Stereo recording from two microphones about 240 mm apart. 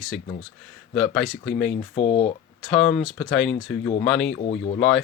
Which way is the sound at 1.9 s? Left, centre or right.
Left.